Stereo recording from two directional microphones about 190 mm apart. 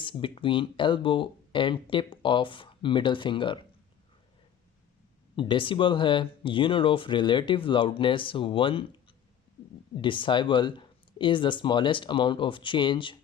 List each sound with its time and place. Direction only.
0.0 s speech: 25° left (ahead or behind)
5.4 s speech: 25° left (ahead or behind)